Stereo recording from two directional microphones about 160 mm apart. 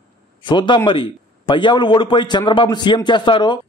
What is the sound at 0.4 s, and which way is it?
A man's voice, 30° left (ahead or behind).